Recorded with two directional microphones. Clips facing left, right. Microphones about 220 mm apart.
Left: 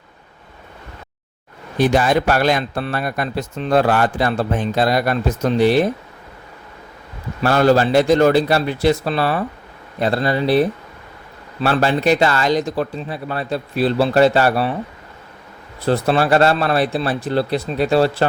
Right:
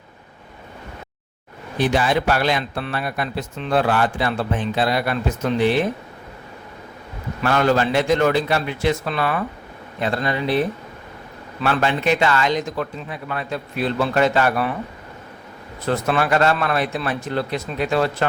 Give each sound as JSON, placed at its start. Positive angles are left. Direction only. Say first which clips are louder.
{"t": 1.8, "sound": "speech", "louder": "left 4 dB", "side_deg": 45}
{"t": 7.4, "sound": "speech", "louder": "left 4 dB", "side_deg": 35}
{"t": 15.9, "sound": "speech", "louder": "left 4 dB", "side_deg": 30}